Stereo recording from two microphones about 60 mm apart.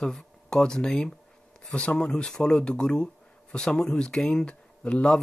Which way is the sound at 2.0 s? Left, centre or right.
Centre.